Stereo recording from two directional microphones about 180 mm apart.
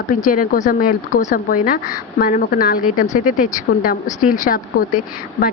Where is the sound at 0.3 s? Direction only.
50° left (ahead or behind).